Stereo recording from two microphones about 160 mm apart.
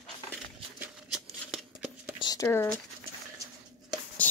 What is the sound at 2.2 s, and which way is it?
Speech, 25° left (ahead or behind).